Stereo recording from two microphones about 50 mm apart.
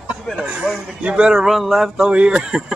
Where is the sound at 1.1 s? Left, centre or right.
Centre.